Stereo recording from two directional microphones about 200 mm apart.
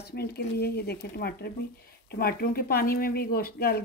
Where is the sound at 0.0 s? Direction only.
55° left (ahead or behind).